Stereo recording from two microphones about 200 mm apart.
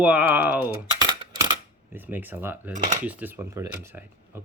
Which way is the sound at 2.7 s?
35° right (ahead or behind).